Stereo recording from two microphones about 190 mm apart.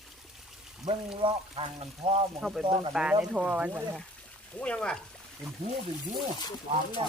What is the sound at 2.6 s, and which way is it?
Speech, 25° right (ahead or behind).